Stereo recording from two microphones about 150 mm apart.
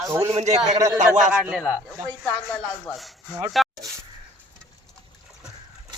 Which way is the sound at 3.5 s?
Centre (ahead or behind).